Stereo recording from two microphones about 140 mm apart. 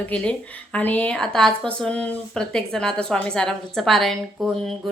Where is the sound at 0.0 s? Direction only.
10° left (ahead or behind).